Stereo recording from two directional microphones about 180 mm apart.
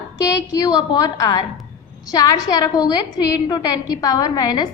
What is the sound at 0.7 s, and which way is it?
Speech, 20° left (ahead or behind).